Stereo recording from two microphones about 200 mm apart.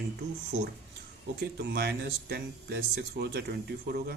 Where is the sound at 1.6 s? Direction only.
55° right (ahead or behind).